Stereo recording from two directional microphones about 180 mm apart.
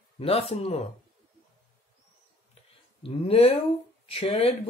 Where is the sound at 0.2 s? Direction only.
30° left (ahead or behind).